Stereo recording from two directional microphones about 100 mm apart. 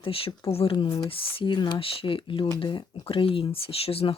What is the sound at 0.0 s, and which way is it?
Speech, 70° left (ahead or behind).